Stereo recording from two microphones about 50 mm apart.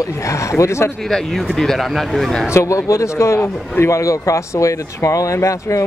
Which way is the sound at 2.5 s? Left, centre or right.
Left.